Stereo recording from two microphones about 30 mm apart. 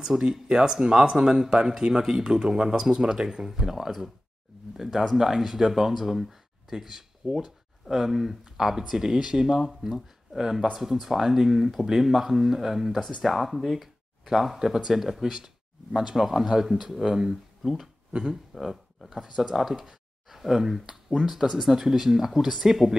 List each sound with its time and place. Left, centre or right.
0.2 s speech: right